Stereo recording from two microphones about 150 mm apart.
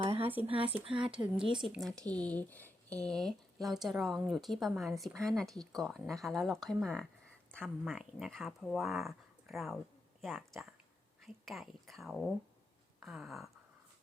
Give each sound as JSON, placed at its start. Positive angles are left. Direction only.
{"t": 0.0, "sound": "a sound", "side_deg": -40}
{"t": 0.9, "sound": "speech", "side_deg": -35}
{"t": 1.5, "sound": "speech", "side_deg": 0}